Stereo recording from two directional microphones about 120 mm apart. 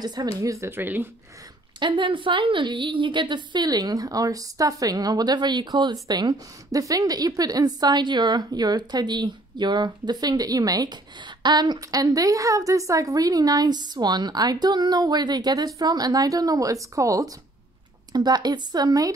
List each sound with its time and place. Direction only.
0.0 s speech: 35° right (ahead or behind); by 1.0 s 15° right (ahead or behind)
1.8 s a woman's voice: 40° right (ahead or behind)